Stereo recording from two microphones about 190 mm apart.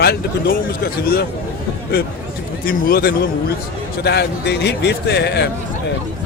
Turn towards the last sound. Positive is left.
turn(degrees=60)  # may be behind; listen again after turning